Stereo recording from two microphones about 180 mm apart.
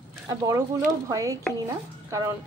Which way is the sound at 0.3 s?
15° right (ahead or behind).